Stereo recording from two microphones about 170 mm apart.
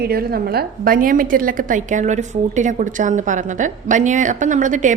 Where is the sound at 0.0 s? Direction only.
65° right (ahead or behind).